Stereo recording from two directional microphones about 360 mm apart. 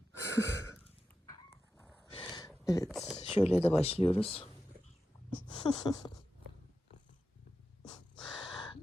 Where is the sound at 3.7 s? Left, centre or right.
Centre.